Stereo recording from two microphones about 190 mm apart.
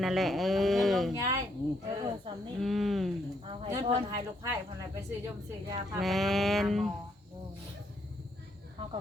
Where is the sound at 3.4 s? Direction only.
25° right (ahead or behind).